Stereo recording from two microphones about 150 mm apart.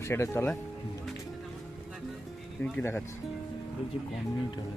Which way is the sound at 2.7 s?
15° left (ahead or behind).